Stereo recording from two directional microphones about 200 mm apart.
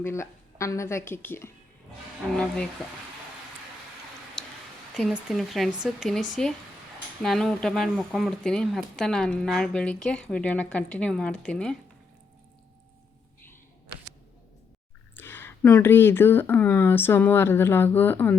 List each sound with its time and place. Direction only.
0.0 s speech: 15° left (ahead or behind)
4.9 s speech: centre (ahead or behind)
15.1 s speech: 10° left (ahead or behind)